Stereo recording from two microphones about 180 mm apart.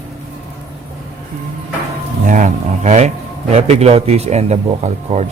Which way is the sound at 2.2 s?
45° right (ahead or behind).